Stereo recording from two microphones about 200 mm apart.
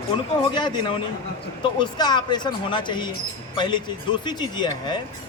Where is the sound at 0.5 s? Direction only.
20° left (ahead or behind).